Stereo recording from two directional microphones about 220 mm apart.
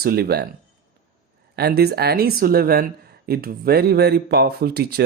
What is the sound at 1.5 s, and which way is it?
Speech, 45° right (ahead or behind).